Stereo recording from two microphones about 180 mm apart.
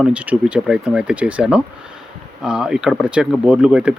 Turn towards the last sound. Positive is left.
turn(degrees=-5)  # may be behind; listen again after turning